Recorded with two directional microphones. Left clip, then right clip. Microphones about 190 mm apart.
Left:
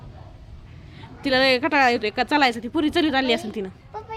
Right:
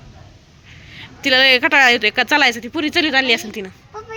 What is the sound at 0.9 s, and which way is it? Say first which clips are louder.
Speech: right 7 dB; 5° left (ahead or behind).